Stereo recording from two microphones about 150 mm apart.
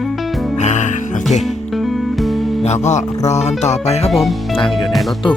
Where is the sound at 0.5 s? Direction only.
50° left (ahead or behind).